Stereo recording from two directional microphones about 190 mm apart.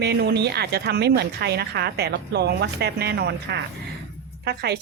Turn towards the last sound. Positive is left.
turn(degrees=-60)  # may be behind; listen again after turning